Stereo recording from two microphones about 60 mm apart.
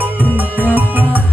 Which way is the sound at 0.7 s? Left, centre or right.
Right.